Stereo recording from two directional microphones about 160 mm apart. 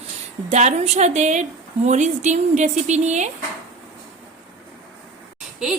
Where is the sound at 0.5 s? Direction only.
45° right (ahead or behind).